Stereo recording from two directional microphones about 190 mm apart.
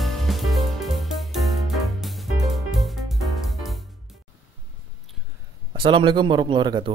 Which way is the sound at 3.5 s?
Centre (ahead or behind).